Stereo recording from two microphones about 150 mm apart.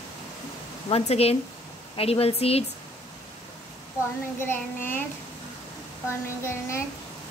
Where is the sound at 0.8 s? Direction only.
40° left (ahead or behind).